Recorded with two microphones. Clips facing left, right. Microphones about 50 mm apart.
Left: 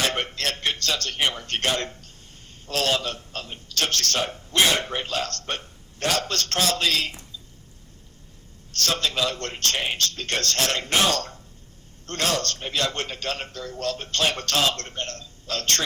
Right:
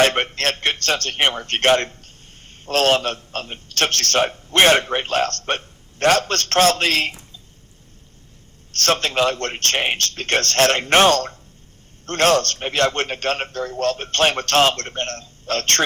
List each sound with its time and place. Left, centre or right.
0.0 s a man's voice: right
8.7 s a man's voice: right